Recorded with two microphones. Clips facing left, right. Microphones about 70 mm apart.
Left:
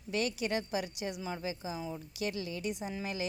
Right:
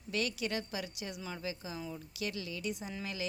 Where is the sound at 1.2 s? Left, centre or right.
Centre.